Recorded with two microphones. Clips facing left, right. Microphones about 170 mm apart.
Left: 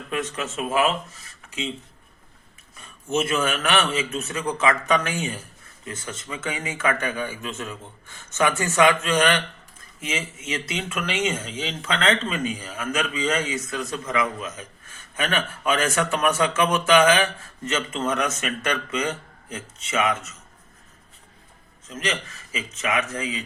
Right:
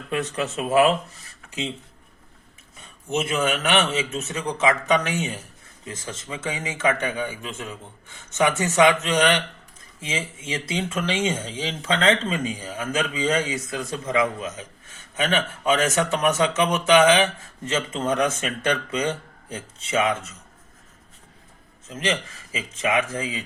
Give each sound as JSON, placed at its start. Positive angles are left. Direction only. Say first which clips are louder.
{"t": 0.1, "sound": "speech", "louder": "right 3 dB", "side_deg": -35}
{"t": 2.8, "sound": "a man's voice", "louder": "left 2 dB", "side_deg": -15}
{"t": 21.9, "sound": "a man's voice", "louder": "right 3 dB", "side_deg": -25}